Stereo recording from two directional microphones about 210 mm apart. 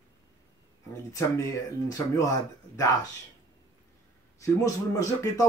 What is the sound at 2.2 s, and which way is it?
Speech, 15° left (ahead or behind).